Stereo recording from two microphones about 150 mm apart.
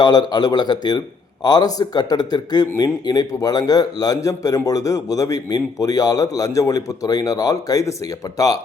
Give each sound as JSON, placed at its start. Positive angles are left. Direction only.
{"t": 0.0, "sound": "a man's voice", "side_deg": 30}